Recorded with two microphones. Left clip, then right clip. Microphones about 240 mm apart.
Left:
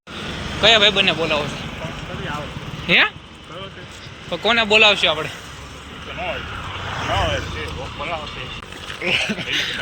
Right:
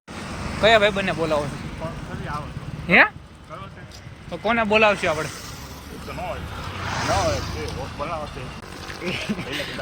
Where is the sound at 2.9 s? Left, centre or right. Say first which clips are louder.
Even; centre.